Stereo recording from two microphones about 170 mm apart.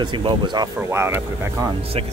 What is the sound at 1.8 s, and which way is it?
Speech, 35° right (ahead or behind).